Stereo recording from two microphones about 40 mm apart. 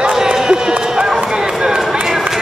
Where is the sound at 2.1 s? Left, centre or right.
Centre.